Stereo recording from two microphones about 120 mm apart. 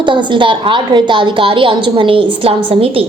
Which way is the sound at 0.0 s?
40° right (ahead or behind).